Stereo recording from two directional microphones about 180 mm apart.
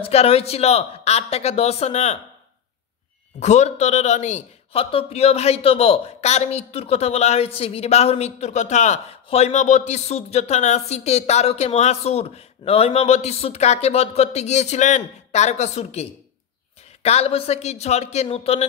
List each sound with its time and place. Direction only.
0.0 s a man's voice: 35° left (ahead or behind)
3.3 s a man's voice: 40° left (ahead or behind)